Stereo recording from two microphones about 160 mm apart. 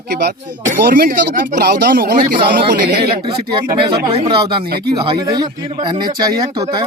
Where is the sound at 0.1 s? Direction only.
85° right.